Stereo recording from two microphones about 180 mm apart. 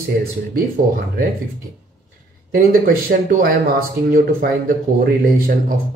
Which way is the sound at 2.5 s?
55° right (ahead or behind).